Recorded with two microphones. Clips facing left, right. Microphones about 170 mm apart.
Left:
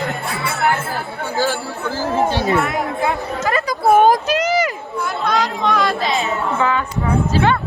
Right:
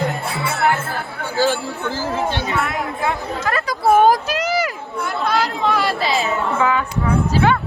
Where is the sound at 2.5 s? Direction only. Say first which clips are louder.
Left 4 dB; centre (ahead or behind).